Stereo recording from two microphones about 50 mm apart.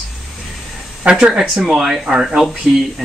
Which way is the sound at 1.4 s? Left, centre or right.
Centre.